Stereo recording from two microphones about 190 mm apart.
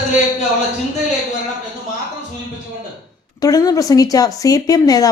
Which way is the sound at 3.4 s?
20° left (ahead or behind).